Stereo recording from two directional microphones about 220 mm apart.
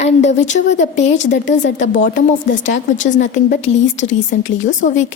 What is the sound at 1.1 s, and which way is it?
Speech, 55° left (ahead or behind).